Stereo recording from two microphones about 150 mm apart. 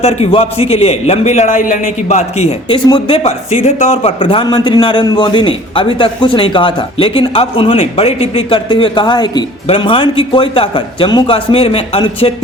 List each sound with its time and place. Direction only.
0.0 s a man's voice: 40° left (ahead or behind)
2.8 s speech: 30° left (ahead or behind)
3.2 s a man's voice: 50° left (ahead or behind)